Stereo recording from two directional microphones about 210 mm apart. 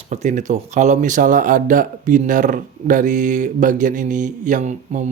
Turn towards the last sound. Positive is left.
turn(degrees=-35)  # may be behind; listen again after turning